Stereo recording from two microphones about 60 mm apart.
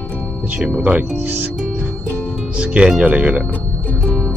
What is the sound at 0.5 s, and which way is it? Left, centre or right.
Speech, right.